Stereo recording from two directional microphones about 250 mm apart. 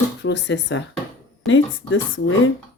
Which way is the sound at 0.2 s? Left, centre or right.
Left.